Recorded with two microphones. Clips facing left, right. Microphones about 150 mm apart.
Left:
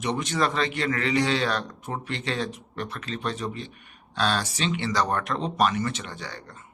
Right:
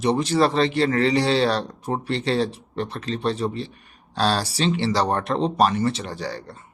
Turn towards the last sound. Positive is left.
turn(degrees=-35)  # may be behind; listen again after turning